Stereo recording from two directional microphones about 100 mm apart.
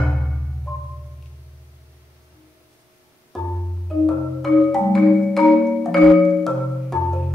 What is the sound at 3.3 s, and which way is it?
Music, 5° left (ahead or behind).